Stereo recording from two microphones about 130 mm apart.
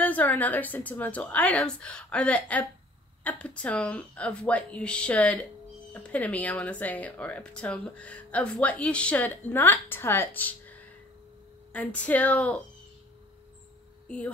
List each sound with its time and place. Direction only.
0.0 s speech: 10° left (ahead or behind)
11.7 s speech: 10° left (ahead or behind)
14.0 s speech: 10° left (ahead or behind)